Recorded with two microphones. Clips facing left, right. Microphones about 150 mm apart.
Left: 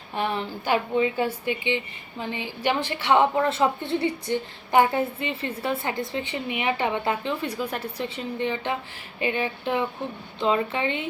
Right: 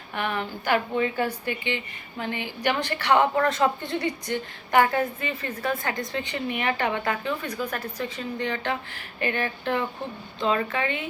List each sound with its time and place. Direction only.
0.1 s a woman's voice: 20° left (ahead or behind)
6.5 s a woman's voice: 15° left (ahead or behind)
9.2 s a woman's voice: 15° left (ahead or behind)